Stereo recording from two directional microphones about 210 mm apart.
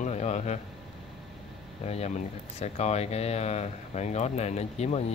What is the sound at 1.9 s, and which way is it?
Speech, 30° left (ahead or behind).